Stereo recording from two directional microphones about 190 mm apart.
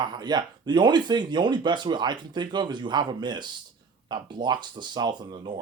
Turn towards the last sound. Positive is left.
turn(degrees=-25)  # may be behind; listen again after turning